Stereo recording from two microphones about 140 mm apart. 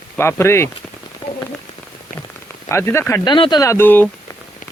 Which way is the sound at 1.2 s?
35° left (ahead or behind).